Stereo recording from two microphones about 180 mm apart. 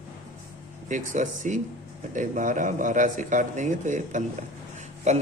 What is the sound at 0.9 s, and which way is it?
A man's voice, 45° right (ahead or behind).